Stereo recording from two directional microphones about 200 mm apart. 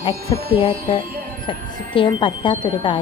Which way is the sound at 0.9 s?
25° left (ahead or behind).